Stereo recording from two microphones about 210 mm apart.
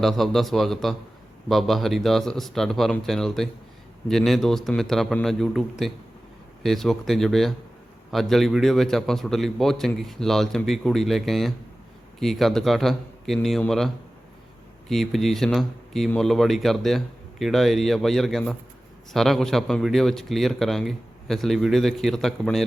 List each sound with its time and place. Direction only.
0.0 s a man's voice: centre (ahead or behind)